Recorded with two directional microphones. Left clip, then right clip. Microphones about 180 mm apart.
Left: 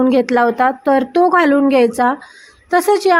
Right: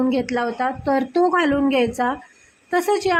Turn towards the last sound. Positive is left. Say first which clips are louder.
# left 7 dB
turn(degrees=20)  # may be behind; listen again after turning